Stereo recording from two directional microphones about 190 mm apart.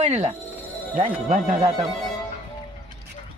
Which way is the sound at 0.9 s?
40° right (ahead or behind).